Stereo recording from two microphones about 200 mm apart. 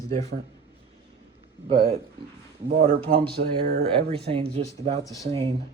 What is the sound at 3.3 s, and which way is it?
Speech, 55° right (ahead or behind).